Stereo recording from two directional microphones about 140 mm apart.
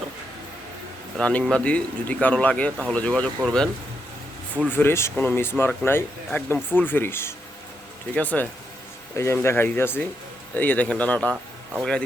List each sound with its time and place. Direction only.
1.2 s speech: 10° left (ahead or behind)
4.7 s speech: 15° left (ahead or behind)